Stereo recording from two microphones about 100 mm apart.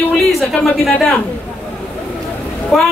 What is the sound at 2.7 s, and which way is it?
Speech, 5° left (ahead or behind).